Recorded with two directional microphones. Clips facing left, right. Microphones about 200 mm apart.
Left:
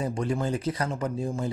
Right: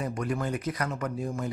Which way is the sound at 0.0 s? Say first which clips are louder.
Left 3 dB; 30° left (ahead or behind).